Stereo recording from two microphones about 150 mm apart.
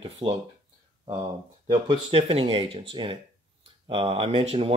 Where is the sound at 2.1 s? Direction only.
40° right (ahead or behind).